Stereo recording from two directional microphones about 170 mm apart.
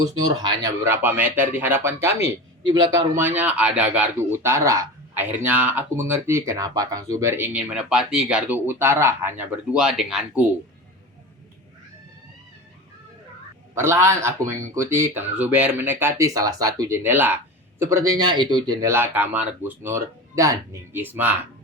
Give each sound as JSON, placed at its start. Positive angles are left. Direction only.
{"t": 0.3, "sound": "speech", "side_deg": -20}
{"t": 13.7, "sound": "speech", "side_deg": -15}